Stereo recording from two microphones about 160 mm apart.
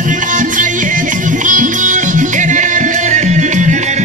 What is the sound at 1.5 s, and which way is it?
Music, 55° right (ahead or behind).